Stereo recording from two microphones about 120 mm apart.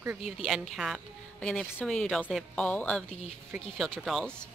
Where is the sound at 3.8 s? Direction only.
Centre (ahead or behind).